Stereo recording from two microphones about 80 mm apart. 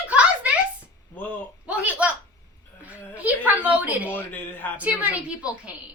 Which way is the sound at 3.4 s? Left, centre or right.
Right.